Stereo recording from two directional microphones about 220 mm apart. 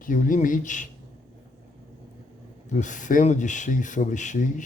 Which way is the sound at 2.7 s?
35° left (ahead or behind).